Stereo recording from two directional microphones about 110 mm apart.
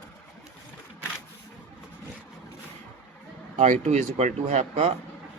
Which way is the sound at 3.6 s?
90° right.